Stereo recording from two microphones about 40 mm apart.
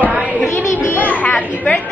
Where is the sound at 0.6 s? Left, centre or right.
Left.